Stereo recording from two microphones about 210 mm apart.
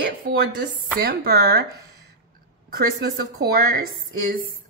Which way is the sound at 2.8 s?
45° right (ahead or behind).